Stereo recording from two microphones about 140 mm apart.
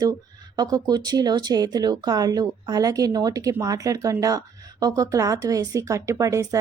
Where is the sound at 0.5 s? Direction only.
30° right (ahead or behind).